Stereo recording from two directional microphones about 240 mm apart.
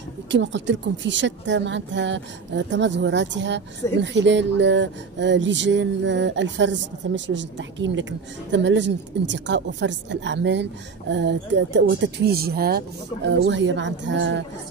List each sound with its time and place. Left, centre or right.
0.3 s speech: right